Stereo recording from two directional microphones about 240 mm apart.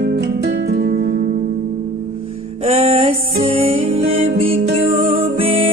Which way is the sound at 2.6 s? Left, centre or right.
Right.